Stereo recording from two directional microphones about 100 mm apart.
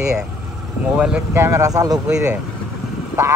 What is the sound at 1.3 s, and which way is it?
Speech, 30° right (ahead or behind).